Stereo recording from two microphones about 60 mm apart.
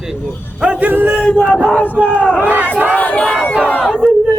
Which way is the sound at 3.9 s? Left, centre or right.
Centre.